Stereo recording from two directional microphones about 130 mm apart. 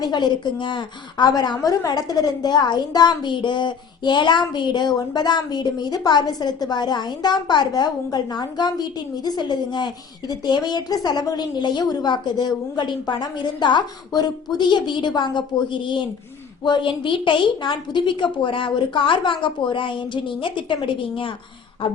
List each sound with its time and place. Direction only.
0.0 s a woman's voice: 35° left (ahead or behind)